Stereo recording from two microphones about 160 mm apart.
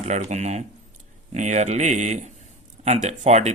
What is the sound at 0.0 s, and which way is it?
Speech, 45° right (ahead or behind).